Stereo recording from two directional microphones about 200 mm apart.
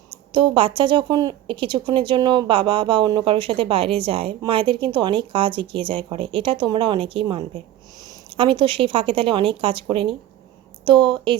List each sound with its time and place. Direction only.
0.3 s a woman's voice: 25° right (ahead or behind)